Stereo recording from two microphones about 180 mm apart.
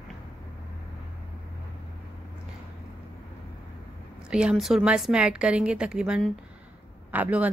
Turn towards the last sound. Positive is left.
turn(degrees=-10)  # may be behind; listen again after turning